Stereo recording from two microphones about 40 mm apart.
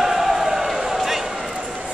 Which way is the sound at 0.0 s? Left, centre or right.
Centre.